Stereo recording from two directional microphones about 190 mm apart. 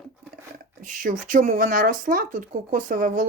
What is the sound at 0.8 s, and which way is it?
Speech, 45° right (ahead or behind).